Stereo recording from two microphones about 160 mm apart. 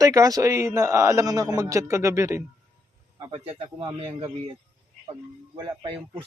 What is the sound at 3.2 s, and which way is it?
A man's voice, 30° right (ahead or behind).